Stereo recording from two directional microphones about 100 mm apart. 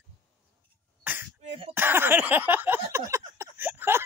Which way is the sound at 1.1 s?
20° right (ahead or behind).